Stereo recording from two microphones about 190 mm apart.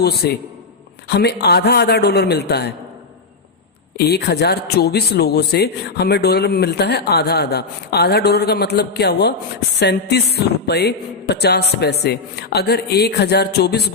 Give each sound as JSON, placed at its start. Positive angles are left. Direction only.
{"t": 0.0, "sound": "speech", "side_deg": 60}
{"t": 3.9, "sound": "speech", "side_deg": 60}